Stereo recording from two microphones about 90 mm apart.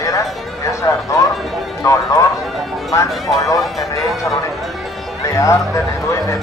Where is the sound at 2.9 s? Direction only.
40° left (ahead or behind).